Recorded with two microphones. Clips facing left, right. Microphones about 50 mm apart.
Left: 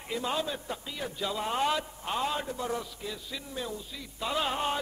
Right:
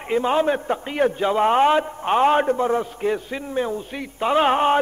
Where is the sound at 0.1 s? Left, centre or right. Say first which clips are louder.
Right 13 dB; right.